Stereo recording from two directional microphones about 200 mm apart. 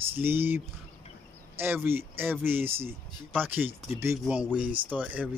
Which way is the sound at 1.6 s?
10° right (ahead or behind).